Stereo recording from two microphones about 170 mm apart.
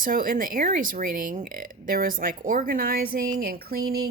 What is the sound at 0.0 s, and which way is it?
Speech, 55° right (ahead or behind).